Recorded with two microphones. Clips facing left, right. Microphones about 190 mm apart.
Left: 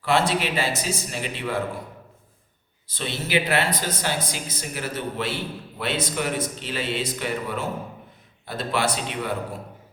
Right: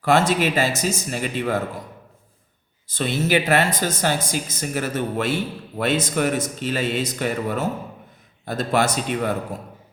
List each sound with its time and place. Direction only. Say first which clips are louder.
0.0 s speech: right 4 dB; 45° right (ahead or behind)
2.8 s speech: right 7 dB; 45° right (ahead or behind)